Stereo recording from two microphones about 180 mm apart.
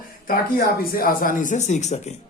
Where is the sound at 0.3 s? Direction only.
55° left (ahead or behind); by 2.1 s 40° left (ahead or behind).